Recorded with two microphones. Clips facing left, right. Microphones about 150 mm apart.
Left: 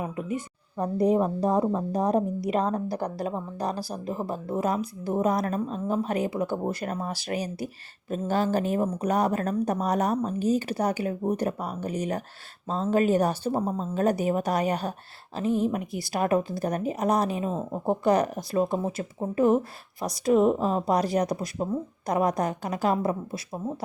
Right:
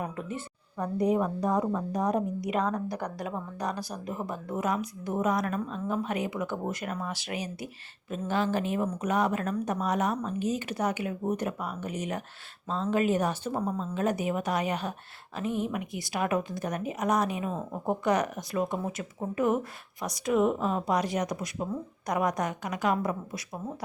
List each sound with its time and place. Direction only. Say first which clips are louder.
0.0 s a woman's voice: left 4 dB; 10° left (ahead or behind)
0.8 s speech: left 4 dB; 35° left (ahead or behind)